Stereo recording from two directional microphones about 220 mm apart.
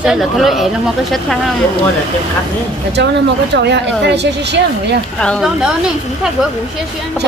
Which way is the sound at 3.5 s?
50° right (ahead or behind).